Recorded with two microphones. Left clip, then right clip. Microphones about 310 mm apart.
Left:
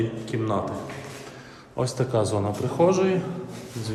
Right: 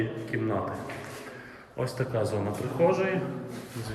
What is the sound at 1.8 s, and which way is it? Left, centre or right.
Speech, centre.